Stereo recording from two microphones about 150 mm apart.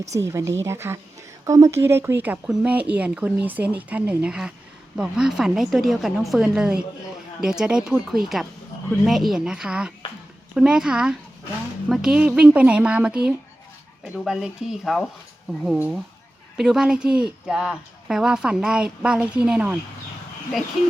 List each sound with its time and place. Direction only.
0.2 s a woman's voice: 20° right (ahead or behind)